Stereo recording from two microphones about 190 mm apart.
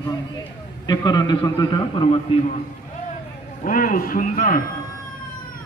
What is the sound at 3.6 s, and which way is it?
A man's voice, 45° left (ahead or behind).